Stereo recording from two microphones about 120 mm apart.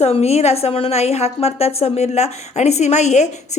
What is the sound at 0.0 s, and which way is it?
A woman's voice, 60° left (ahead or behind).